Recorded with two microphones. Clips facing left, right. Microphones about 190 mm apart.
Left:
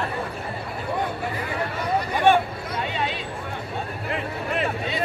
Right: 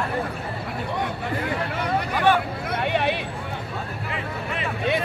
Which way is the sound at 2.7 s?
60° right (ahead or behind).